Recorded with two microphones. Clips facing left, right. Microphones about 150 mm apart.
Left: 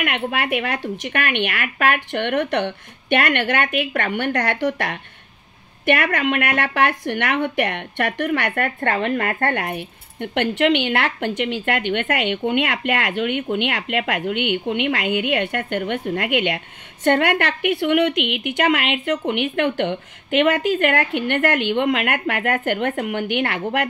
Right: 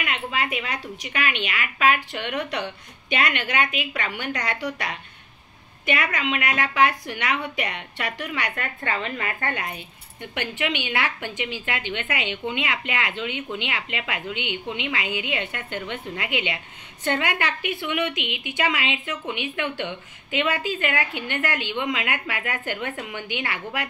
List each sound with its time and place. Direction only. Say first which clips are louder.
0.0 s a woman's voice: left 5 dB; 65° left (ahead or behind)